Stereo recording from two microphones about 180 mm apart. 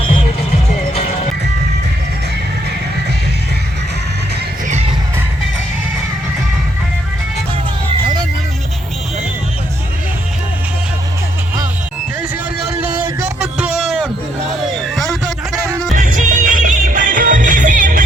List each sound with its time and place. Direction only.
13.4 s a sound: 5° right (ahead or behind)
14.8 s music: centre (ahead or behind)
16.0 s music: 50° right (ahead or behind)